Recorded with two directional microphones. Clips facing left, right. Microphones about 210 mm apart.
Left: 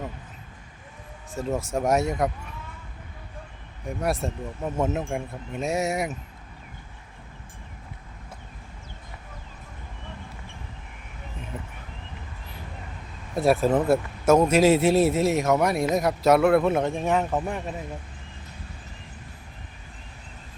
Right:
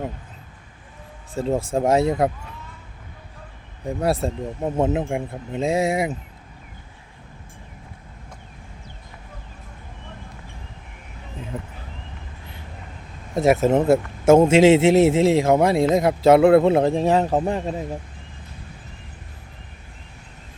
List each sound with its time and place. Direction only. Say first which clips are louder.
1.4 s speech: right 5 dB; 30° right (ahead or behind)
3.8 s speech: right 5 dB; 30° right (ahead or behind)
4.9 s speech: right 5 dB; 20° right (ahead or behind)
13.3 s speech: right 4 dB; 20° right (ahead or behind)